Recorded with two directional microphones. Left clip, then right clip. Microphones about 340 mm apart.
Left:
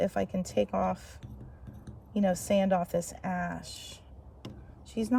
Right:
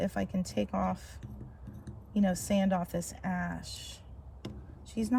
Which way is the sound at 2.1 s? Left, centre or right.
Centre.